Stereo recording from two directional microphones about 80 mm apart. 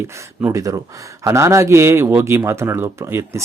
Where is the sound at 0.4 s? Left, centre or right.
Right.